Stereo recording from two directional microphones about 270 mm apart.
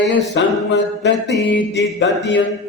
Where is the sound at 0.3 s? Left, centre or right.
Left.